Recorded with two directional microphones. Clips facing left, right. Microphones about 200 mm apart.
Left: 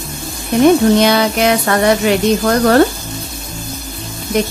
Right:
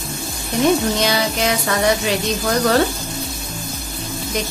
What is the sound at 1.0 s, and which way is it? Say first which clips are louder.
Speech: left 7 dB; 60° left (ahead or behind).